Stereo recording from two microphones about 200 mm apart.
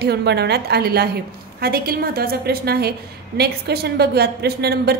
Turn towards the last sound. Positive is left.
turn(degrees=-50)  # may be behind; listen again after turning